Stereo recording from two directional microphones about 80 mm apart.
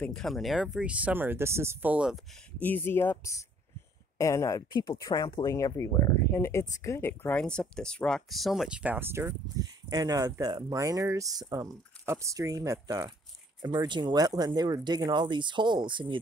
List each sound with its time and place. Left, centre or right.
0.1 s speech: centre; by 1.9 s right
2.6 s speech: left
6.3 s speech: left
7.3 s speech: centre
8.3 s speech: centre
9.6 s speech: right
13.6 s speech: right